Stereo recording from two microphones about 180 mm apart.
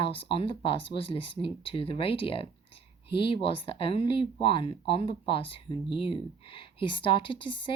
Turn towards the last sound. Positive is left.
turn(degrees=30)  # may be behind; listen again after turning